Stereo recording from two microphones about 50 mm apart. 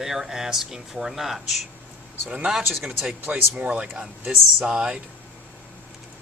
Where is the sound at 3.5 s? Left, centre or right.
Right.